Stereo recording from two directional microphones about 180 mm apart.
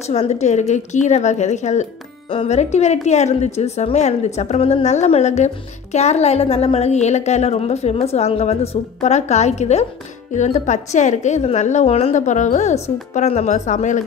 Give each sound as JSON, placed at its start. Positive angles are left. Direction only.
{"t": 0.0, "sound": "a woman's voice", "side_deg": 35}